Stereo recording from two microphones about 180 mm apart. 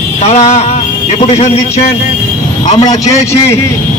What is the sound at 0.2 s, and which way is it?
A man's voice, 35° left (ahead or behind).